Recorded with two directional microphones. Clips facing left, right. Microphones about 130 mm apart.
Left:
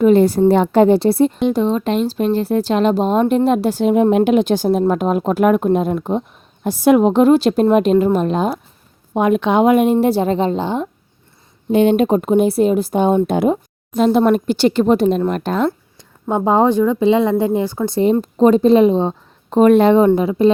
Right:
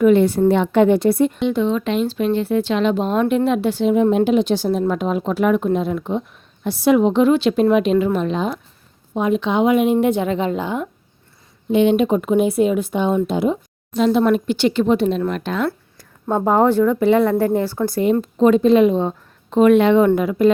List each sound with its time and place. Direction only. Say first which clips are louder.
0.0 s speech: left 2 dB; 35° left (ahead or behind)
4.1 s a woman's voice: left 2 dB; 60° left (ahead or behind)
9.1 s speech: left 4 dB; 60° left (ahead or behind); by 10.8 s 30° left (ahead or behind)
11.7 s a woman's voice: left 2 dB; 45° left (ahead or behind)
16.2 s speech: left 1 dB; 15° left (ahead or behind)
17.8 s speech: left 4 dB; 30° left (ahead or behind)